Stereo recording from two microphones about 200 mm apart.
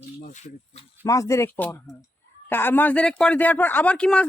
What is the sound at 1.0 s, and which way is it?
Speech, 15° left (ahead or behind).